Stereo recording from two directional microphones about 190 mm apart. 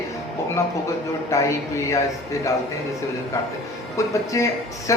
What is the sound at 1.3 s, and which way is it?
Speech, 15° left (ahead or behind).